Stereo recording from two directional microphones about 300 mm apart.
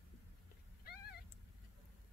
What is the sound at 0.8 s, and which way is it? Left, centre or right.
Cat, left.